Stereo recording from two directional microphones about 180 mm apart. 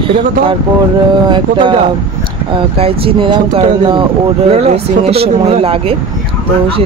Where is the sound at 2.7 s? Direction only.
30° right (ahead or behind).